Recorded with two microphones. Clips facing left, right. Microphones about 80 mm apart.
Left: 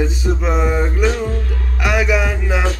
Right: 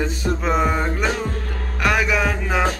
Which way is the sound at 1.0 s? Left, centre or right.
Right.